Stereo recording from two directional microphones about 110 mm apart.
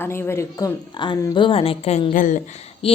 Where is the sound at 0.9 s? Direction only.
45° left (ahead or behind).